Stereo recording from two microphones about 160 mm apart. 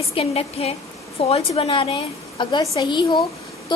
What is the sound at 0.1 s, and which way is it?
A woman's voice, 40° left (ahead or behind).